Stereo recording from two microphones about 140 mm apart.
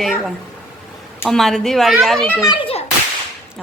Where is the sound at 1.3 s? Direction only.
5° left (ahead or behind).